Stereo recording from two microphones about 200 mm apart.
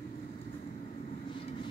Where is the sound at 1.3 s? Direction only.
25° left (ahead or behind).